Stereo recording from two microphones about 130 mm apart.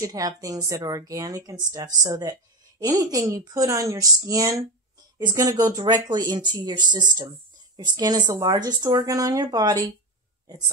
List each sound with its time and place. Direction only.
0.0 s speech: 25° right (ahead or behind)